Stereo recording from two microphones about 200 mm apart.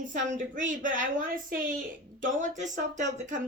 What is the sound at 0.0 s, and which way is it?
Speech, 40° right (ahead or behind).